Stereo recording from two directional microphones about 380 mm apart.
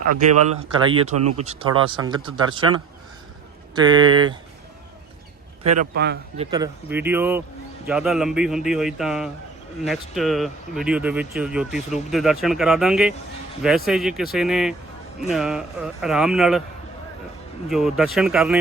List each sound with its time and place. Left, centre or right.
0.0 s speech: right
0.7 s speech: centre
1.1 s speech: right
1.4 s speech: centre
3.8 s speech: centre
5.8 s speech: right
6.4 s speech: centre
17.7 s speech: centre